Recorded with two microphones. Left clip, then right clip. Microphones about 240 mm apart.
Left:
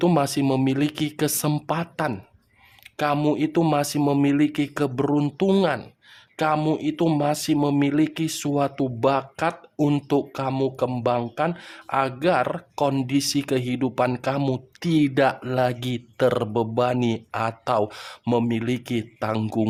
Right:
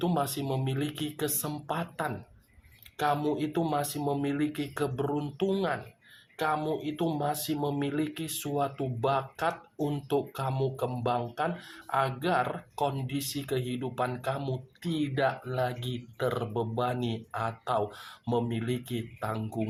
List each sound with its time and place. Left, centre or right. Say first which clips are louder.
0.0 s speech: left 9 dB; left